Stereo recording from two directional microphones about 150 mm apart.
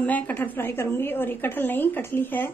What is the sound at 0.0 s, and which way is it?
A woman's voice, 10° left (ahead or behind).